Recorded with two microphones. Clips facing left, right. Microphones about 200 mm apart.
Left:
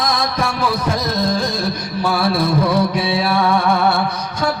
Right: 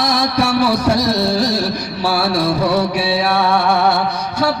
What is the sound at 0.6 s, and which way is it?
Music, 75° right (ahead or behind).